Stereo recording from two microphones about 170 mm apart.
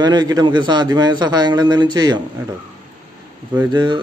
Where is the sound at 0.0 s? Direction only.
25° right (ahead or behind).